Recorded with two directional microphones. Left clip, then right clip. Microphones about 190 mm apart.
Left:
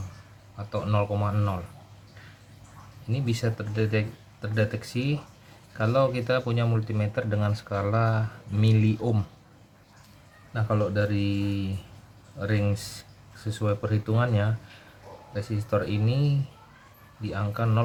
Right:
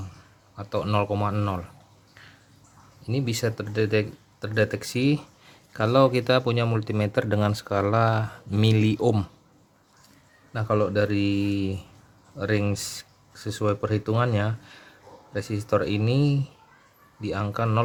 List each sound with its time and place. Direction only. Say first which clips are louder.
0.5 s speech: right 3 dB; 55° right (ahead or behind)
3.1 s speech: right 4 dB; 55° right (ahead or behind)
10.5 s speech: right 4 dB; 55° right (ahead or behind)